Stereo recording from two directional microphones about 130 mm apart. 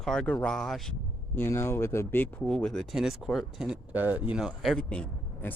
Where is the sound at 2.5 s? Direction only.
5° left (ahead or behind).